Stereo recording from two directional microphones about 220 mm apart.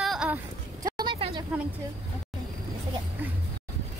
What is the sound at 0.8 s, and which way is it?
Vehicle, 20° right (ahead or behind).